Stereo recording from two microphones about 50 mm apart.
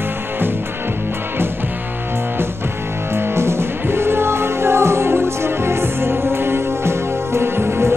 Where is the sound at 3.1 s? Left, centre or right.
Right.